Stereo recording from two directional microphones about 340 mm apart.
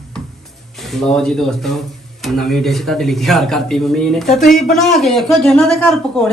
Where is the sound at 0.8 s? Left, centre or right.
Centre.